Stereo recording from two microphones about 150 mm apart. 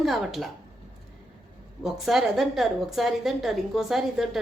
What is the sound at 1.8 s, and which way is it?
Speech, centre (ahead or behind).